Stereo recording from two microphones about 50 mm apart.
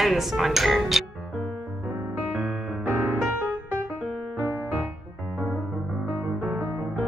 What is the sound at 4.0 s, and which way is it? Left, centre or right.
Music, right.